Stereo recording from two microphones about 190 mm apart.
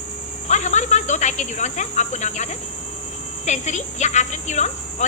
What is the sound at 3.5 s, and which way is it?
A woman's voice, 40° left (ahead or behind).